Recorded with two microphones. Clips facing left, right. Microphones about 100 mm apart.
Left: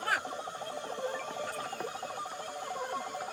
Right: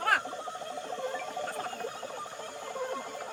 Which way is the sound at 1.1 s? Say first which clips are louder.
Right 2 dB; 50° right (ahead or behind).